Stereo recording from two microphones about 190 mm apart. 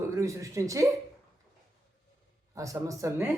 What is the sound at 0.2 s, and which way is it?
Speech, 15° right (ahead or behind).